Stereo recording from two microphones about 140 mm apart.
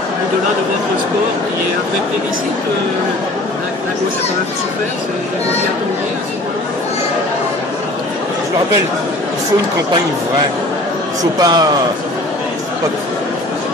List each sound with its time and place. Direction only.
11.3 s speech: 30° right (ahead or behind)